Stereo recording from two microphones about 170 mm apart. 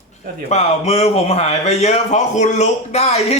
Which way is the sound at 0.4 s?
40° left (ahead or behind).